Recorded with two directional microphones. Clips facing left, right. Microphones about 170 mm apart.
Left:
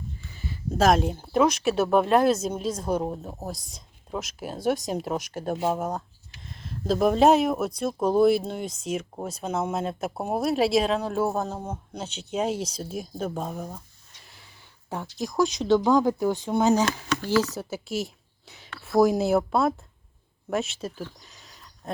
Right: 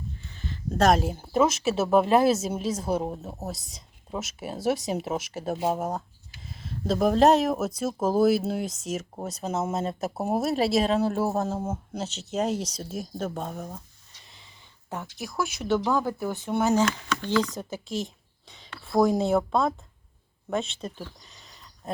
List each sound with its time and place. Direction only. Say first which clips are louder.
0.3 s speech: even; 10° left (ahead or behind)
14.3 s a sound: left 1 dB; 5° left (ahead or behind)
15.4 s speech: left 5 dB; 5° right (ahead or behind)
15.7 s speech: left 4 dB; 15° left (ahead or behind)